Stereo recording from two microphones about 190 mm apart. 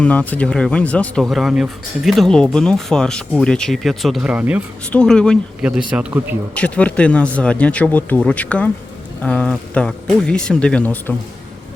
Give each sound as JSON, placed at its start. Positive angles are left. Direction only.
{"t": 0.0, "sound": "speech", "side_deg": 5}
{"t": 4.9, "sound": "speech", "side_deg": 5}
{"t": 6.5, "sound": "speech", "side_deg": 5}